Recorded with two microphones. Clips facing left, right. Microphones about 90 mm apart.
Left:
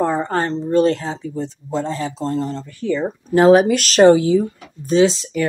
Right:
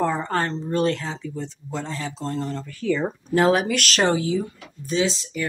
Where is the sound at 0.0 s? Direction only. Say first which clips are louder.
Left 4 dB; 30° left (ahead or behind).